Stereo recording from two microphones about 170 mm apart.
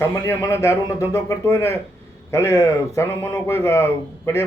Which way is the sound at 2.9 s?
15° left (ahead or behind).